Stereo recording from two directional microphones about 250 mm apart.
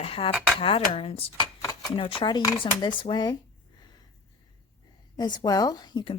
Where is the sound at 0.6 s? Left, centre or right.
Left.